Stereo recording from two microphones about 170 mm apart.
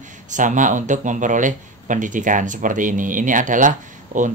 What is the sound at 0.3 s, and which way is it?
Speech, 50° right (ahead or behind).